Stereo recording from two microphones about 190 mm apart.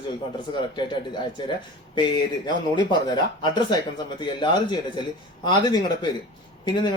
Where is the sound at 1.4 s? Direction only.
25° left (ahead or behind).